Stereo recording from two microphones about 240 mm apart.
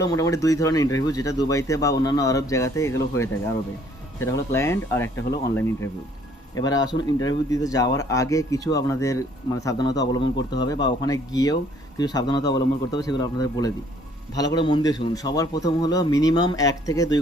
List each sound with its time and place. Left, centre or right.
0.0 s speech: centre